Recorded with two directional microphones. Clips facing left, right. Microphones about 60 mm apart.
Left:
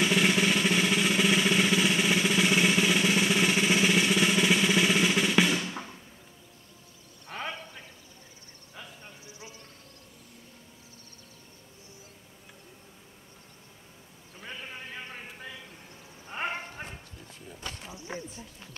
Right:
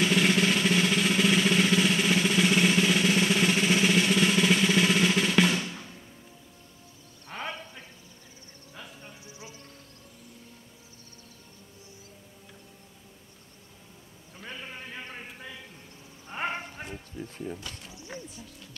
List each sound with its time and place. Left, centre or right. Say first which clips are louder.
0.0 s drum: right 1 dB; centre
7.2 s music: even; centre
9.3 s cricket: even; right
14.4 s a sound: even; centre
17.3 s a sound: right 10 dB; right
17.6 s wild animals: left 2 dB; left